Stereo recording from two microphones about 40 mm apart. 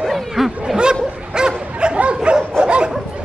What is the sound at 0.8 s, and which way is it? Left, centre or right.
Bow-wow, right.